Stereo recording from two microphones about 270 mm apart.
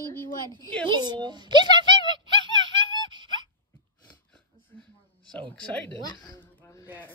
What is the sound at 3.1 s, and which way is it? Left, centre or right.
Wail, centre.